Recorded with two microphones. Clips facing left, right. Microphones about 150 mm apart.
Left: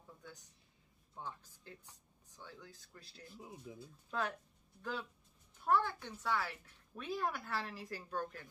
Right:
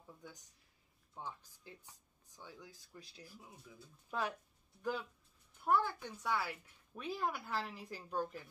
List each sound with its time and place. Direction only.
1.2 s a woman's voice: 10° right (ahead or behind)
3.3 s speech: 25° left (ahead or behind)
4.1 s a woman's voice: 10° right (ahead or behind)
5.7 s a woman's voice: 10° right (ahead or behind)